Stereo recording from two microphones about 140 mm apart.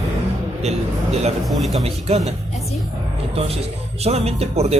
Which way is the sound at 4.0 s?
50° right (ahead or behind).